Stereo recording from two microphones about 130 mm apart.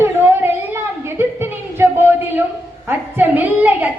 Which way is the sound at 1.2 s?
15° right (ahead or behind).